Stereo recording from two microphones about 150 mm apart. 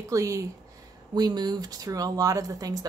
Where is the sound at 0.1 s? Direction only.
20° right (ahead or behind).